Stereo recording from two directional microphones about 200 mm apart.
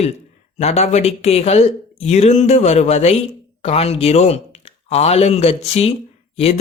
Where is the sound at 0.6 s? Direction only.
35° left (ahead or behind).